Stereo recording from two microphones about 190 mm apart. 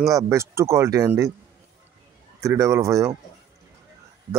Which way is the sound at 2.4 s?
15° right (ahead or behind).